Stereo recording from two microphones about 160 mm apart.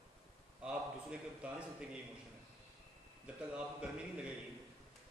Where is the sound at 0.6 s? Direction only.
5° right (ahead or behind).